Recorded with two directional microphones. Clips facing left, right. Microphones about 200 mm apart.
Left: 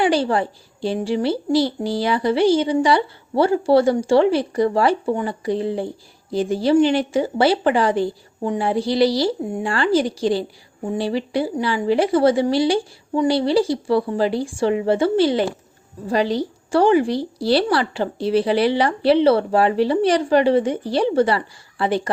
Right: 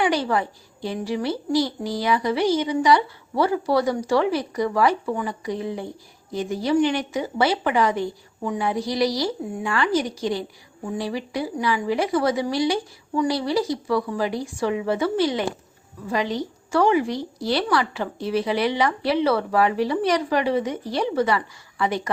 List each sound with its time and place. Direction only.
0.0 s a child's voice: 30° left (ahead or behind)